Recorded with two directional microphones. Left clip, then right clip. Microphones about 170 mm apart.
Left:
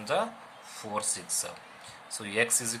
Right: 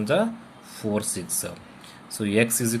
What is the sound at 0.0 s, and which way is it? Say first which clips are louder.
Speech: right 6 dB; 15° right (ahead or behind).